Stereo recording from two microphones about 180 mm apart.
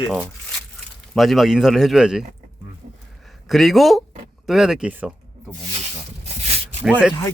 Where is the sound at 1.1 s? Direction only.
Centre (ahead or behind).